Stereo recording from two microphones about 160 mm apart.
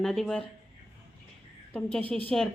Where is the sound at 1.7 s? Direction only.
5° left (ahead or behind).